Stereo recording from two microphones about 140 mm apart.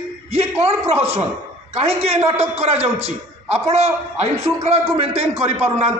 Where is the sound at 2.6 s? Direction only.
45° right (ahead or behind).